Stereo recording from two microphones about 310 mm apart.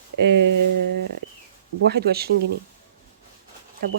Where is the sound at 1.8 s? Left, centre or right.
Right.